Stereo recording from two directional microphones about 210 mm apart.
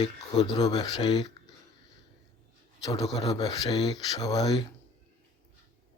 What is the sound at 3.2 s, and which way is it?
Speech, 15° left (ahead or behind).